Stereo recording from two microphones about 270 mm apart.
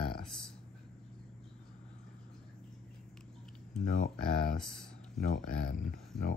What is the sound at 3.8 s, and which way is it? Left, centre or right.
Speech, left.